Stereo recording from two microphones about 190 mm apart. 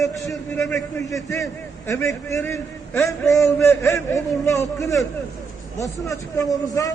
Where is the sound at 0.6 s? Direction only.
10° left (ahead or behind).